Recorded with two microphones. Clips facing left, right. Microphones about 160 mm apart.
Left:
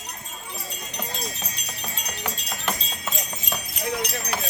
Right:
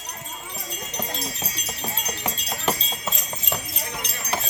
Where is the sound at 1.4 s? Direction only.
30° right (ahead or behind).